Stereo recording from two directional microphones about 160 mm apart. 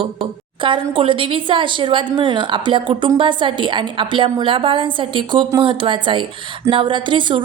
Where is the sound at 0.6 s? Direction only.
30° right (ahead or behind).